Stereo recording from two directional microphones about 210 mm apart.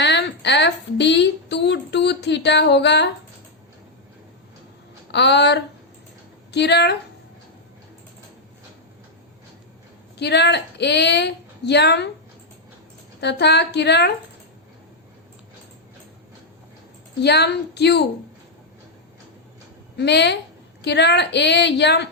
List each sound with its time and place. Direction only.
0.0 s a sound: 55° left (ahead or behind)
5.1 s speech: 55° left (ahead or behind)
10.2 s a woman's voice: 55° left (ahead or behind)
13.1 s a woman's voice: 55° left (ahead or behind)
17.2 s a woman's voice: 50° left (ahead or behind)
20.0 s a woman's voice: 55° left (ahead or behind)